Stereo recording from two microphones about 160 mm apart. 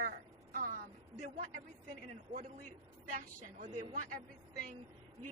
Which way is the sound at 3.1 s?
55° right (ahead or behind).